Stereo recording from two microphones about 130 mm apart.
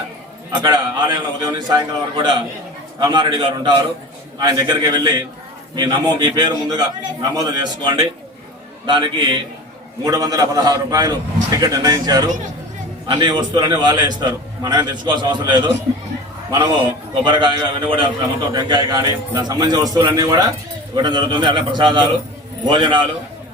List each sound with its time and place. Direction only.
0.6 s a man's voice: 30° right (ahead or behind)
17.2 s a man's voice: 35° right (ahead or behind)